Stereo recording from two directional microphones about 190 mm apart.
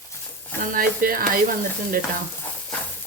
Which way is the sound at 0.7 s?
50° right (ahead or behind).